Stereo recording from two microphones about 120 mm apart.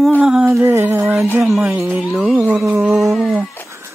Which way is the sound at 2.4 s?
20° right (ahead or behind).